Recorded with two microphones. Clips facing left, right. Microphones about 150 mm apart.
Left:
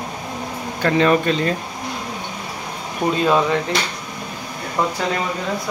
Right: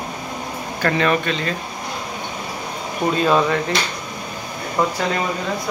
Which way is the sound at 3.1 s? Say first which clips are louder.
Even; 15° left (ahead or behind).